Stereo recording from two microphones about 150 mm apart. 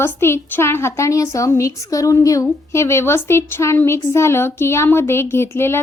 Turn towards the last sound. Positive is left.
turn(degrees=15)  # may be behind; listen again after turning